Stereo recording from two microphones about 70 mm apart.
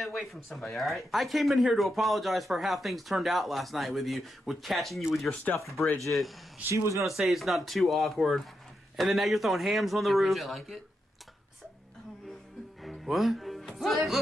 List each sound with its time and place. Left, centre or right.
0.0 s speech: centre
5.3 s speech: left
6.7 s speech: right
7.1 s speech: centre
12.8 s music: centre